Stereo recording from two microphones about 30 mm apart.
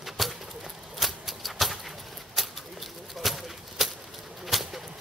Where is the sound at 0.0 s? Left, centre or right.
Centre.